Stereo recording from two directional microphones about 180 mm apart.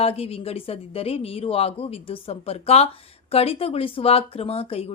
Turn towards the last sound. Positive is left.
turn(degrees=35)  # may be behind; listen again after turning